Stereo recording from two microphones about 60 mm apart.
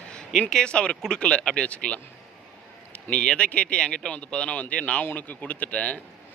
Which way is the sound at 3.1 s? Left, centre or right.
Centre.